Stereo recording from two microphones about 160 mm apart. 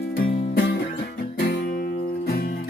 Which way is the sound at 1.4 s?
90° left.